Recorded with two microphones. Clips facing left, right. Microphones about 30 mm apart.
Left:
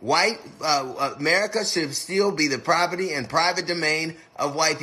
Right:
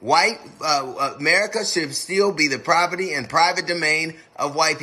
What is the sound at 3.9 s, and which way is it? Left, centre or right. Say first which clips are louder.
Speech: right 4 dB; right.